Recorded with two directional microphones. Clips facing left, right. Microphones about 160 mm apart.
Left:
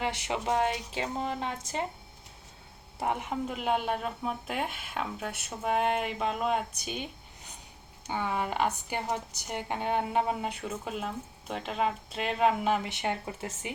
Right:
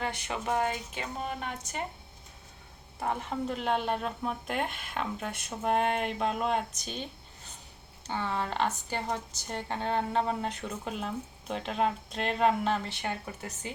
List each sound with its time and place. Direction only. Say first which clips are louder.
0.3 s a woman's voice: left 2 dB; 20° left (ahead or behind)
3.0 s speech: left 1 dB; 15° left (ahead or behind)